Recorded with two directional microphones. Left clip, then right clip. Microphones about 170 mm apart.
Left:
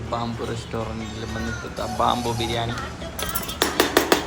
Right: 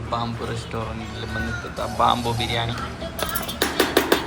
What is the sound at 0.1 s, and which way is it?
Speech, 10° left (ahead or behind).